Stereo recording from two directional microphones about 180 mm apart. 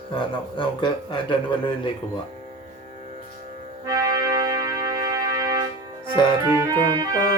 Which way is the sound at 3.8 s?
20° right (ahead or behind).